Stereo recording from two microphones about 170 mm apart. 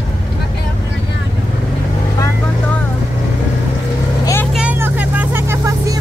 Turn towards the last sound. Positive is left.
turn(degrees=-15)  # may be behind; listen again after turning